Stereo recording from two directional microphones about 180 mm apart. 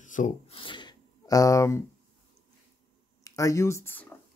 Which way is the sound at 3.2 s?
20° left (ahead or behind).